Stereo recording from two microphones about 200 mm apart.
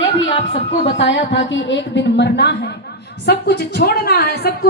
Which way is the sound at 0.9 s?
65° left (ahead or behind).